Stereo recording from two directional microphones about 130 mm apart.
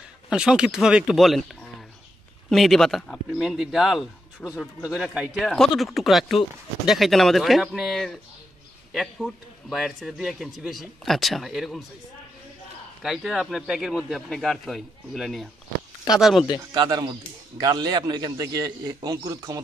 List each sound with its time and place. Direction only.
0.3 s a man's voice: 5° right (ahead or behind)
2.5 s a man's voice: centre (ahead or behind)
4.4 s speech: 10° left (ahead or behind)
4.9 s a man's voice: 5° right (ahead or behind)
13.0 s a man's voice: centre (ahead or behind)
16.7 s a man's voice: 35° right (ahead or behind)